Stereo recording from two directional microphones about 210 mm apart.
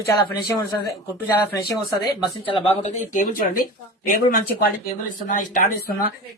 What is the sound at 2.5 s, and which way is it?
Speech, 25° left (ahead or behind).